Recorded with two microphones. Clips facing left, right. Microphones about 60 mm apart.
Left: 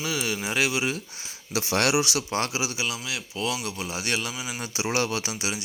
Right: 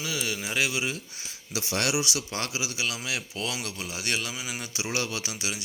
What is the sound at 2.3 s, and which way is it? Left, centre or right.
Speech, left.